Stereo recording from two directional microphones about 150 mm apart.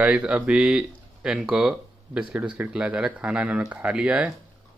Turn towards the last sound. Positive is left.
turn(degrees=-5)  # may be behind; listen again after turning